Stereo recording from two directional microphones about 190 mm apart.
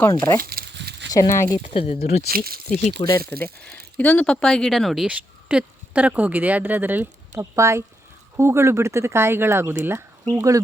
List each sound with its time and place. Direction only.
0.0 s speech: 15° left (ahead or behind)
0.5 s a sound: 60° right (ahead or behind)
1.1 s speech: 15° left (ahead or behind)
1.6 s speech: 30° left (ahead or behind)
2.3 s speech: 50° right (ahead or behind)
3.0 s speech: 25° left (ahead or behind)
3.4 s speech: 5° left (ahead or behind); by 10.6 s 15° right (ahead or behind)